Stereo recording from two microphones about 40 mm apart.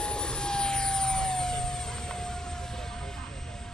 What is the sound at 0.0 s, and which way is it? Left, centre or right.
Vehicle, left.